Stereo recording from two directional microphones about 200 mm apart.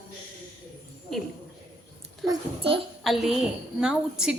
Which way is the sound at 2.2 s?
20° right (ahead or behind).